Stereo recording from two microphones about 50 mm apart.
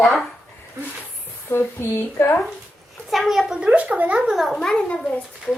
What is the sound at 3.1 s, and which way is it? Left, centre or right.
Speech, centre.